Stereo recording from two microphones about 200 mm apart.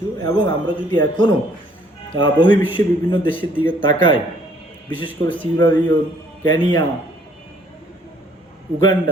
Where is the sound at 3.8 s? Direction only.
25° left (ahead or behind).